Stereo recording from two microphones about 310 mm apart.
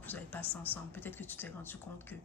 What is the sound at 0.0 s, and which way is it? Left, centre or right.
Speech, centre.